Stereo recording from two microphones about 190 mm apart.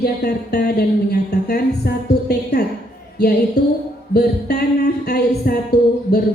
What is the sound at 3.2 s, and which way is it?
Speech, 60° left (ahead or behind).